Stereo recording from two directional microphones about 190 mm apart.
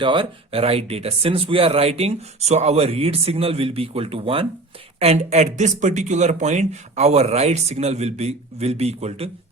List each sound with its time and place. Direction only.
0.0 s speech: 25° right (ahead or behind)